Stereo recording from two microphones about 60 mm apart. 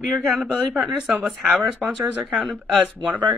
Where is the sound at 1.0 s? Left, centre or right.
Right.